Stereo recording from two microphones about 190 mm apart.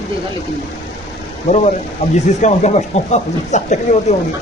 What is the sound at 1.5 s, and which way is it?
Speech, 35° left (ahead or behind).